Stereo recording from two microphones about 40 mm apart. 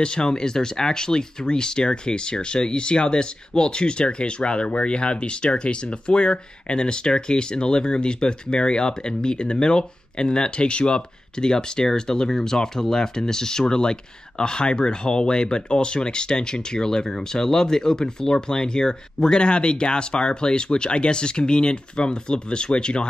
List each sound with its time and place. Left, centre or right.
0.0 s speech: left